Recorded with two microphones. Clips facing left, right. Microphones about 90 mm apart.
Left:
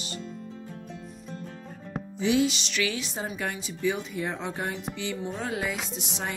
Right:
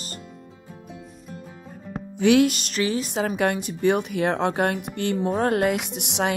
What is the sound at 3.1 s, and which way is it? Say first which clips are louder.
A woman's voice: right 9 dB; 65° right (ahead or behind).